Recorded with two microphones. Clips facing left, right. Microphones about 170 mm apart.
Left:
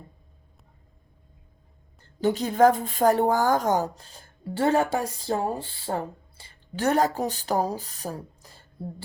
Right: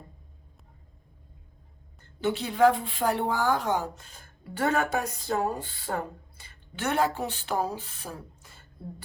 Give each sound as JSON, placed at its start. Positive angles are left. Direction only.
{"t": 2.2, "sound": "a woman's voice", "side_deg": 40}